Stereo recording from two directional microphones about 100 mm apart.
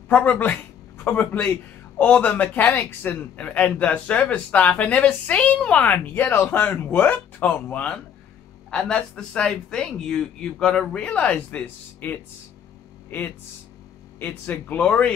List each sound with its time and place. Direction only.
0.1 s speech: 20° left (ahead or behind)
14.2 s speech: 15° left (ahead or behind)